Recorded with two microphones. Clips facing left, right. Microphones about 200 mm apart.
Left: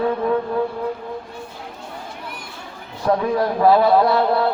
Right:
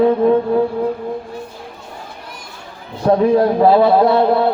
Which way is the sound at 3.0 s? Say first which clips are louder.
Right 6 dB; 30° right (ahead or behind).